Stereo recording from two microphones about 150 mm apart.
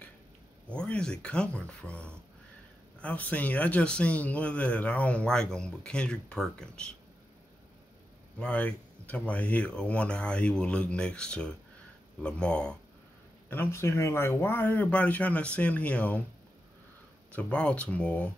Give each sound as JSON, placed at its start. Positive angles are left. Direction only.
{"t": 0.7, "sound": "speech", "side_deg": 10}
{"t": 8.4, "sound": "speech", "side_deg": 10}
{"t": 17.3, "sound": "speech", "side_deg": 10}